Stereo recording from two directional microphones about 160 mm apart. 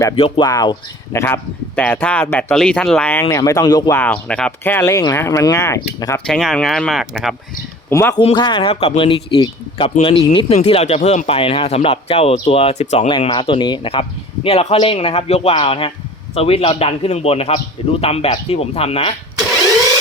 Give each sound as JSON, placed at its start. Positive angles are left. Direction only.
{"t": 0.2, "sound": "speech", "side_deg": 35}
{"t": 0.4, "sound": "speech", "side_deg": 25}
{"t": 1.2, "sound": "speech", "side_deg": 10}
{"t": 3.1, "sound": "speech", "side_deg": 20}
{"t": 3.9, "sound": "speech", "side_deg": 10}
{"t": 6.1, "sound": "speech", "side_deg": 5}
{"t": 7.9, "sound": "speech", "side_deg": 15}
{"t": 8.2, "sound": "speech", "side_deg": 30}